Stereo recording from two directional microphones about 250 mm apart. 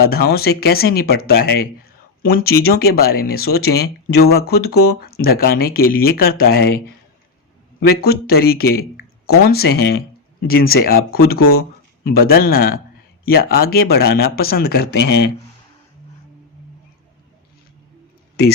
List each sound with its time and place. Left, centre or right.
0.1 s speech: left
7.9 s speech: left